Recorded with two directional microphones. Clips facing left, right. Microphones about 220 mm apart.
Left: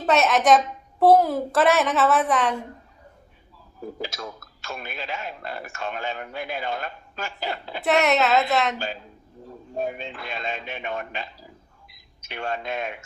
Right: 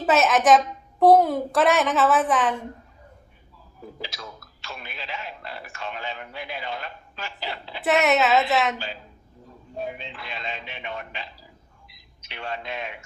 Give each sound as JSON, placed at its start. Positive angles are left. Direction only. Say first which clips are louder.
{"t": 0.0, "sound": "a woman's voice", "louder": "even", "side_deg": 0}
{"t": 4.0, "sound": "speech", "louder": "left 3 dB", "side_deg": 45}
{"t": 7.9, "sound": "a woman's voice", "louder": "even", "side_deg": 0}
{"t": 9.7, "sound": "a man's voice", "louder": "left 4 dB", "side_deg": 45}